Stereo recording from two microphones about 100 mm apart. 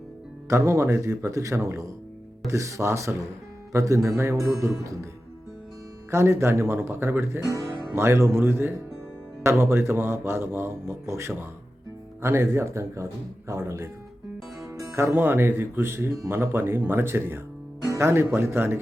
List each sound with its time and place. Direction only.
0.4 s speech: 30° right (ahead or behind)
6.1 s speech: 25° right (ahead or behind)